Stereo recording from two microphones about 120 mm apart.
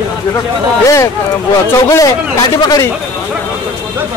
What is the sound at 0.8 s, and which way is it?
Speech, 25° left (ahead or behind).